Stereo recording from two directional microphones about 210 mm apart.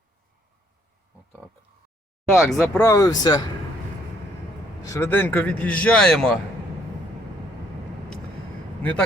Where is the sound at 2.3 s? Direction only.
Centre (ahead or behind).